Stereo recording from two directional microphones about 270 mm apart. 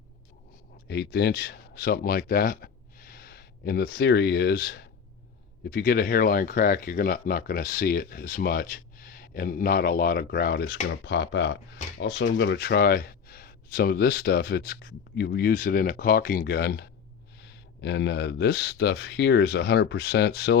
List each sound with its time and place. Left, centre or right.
0.9 s speech: left